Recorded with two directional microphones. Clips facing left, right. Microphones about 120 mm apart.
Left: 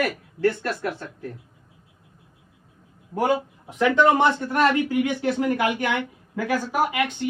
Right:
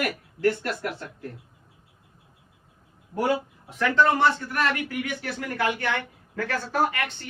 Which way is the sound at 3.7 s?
15° left (ahead or behind).